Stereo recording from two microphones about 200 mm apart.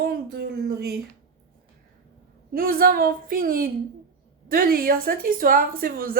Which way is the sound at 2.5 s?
50° right (ahead or behind).